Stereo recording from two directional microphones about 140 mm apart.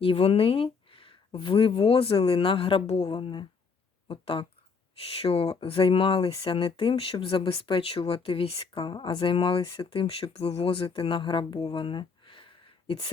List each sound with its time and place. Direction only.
0.0 s speech: 45° left (ahead or behind)